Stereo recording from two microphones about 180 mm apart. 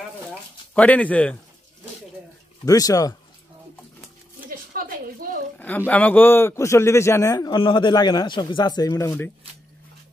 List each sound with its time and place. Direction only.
0.7 s a man's voice: 10° left (ahead or behind)
2.6 s speech: 20° left (ahead or behind)
4.5 s a sound: 55° right (ahead or behind)
5.6 s a man's voice: 10° left (ahead or behind)